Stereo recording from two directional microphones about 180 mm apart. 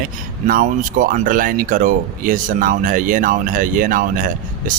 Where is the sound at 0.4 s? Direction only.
50° right (ahead or behind).